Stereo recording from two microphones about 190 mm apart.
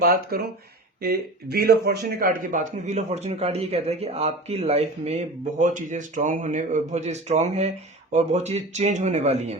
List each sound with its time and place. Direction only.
0.0 s speech: 50° right (ahead or behind); by 9.6 s 35° right (ahead or behind)